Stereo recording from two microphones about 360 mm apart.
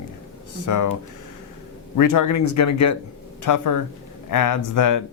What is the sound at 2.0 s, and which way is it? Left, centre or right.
Speech, left.